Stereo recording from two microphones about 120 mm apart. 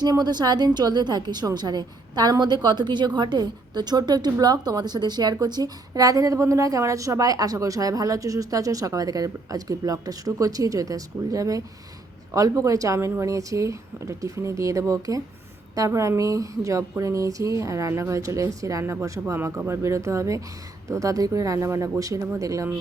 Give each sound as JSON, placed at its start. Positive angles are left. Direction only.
{"t": 0.0, "sound": "a woman's voice", "side_deg": -35}